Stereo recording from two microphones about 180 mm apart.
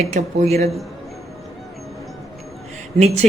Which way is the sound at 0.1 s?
35° right (ahead or behind).